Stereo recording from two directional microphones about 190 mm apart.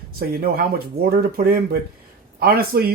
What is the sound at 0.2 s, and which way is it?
Speech, 50° right (ahead or behind).